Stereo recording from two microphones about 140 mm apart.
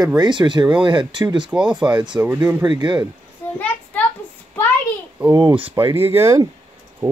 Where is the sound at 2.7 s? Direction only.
30° right (ahead or behind).